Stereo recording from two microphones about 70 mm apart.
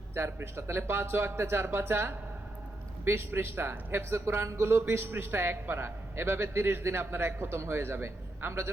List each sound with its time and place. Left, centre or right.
0.1 s a man's voice: right